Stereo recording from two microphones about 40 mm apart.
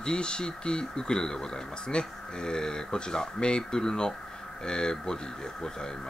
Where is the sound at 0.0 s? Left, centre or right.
Left.